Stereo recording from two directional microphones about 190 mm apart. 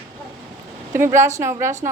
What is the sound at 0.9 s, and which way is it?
Speech, 15° right (ahead or behind).